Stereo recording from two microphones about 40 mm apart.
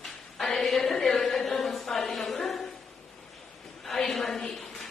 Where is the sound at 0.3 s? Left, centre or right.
Centre.